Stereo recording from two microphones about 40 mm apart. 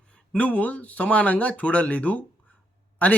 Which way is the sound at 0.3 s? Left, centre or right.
Left.